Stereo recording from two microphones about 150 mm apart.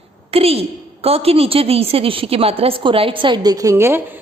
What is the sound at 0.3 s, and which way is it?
A woman's voice, 40° right (ahead or behind).